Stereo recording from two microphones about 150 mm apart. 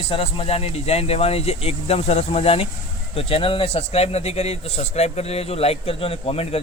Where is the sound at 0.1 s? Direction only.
40° left (ahead or behind).